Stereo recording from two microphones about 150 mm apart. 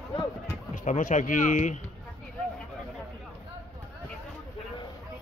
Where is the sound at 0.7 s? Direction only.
60° left (ahead or behind).